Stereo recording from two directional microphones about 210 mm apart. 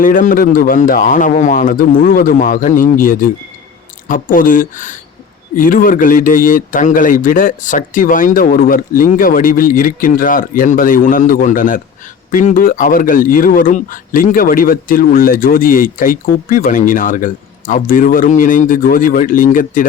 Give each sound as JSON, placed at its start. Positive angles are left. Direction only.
{"t": 0.0, "sound": "speech", "side_deg": 40}